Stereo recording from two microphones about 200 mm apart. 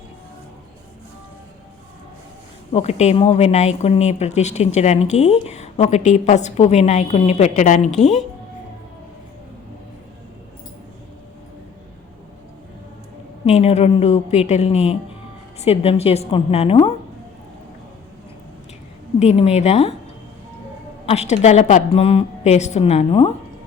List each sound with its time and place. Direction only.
2.7 s speech: 35° left (ahead or behind)
13.4 s speech: 35° left (ahead or behind)
19.2 s speech: 35° left (ahead or behind)
21.1 s speech: 35° left (ahead or behind)